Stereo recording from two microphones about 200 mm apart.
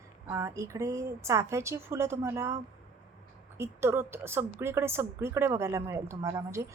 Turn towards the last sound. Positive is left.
turn(degrees=-15)  # may be behind; listen again after turning